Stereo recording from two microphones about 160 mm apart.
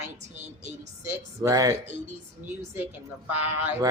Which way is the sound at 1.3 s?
20° right (ahead or behind).